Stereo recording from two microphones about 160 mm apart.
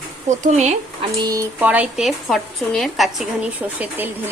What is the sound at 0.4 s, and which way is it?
Speech, 45° right (ahead or behind).